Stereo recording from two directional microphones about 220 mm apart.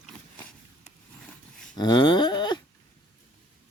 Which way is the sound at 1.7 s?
20° left (ahead or behind).